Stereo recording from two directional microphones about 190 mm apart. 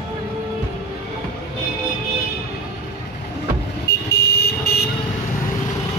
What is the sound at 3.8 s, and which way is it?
Vehicle, 60° left (ahead or behind).